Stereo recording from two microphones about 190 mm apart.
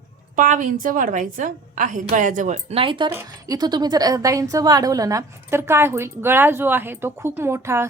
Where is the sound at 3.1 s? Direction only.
15° right (ahead or behind).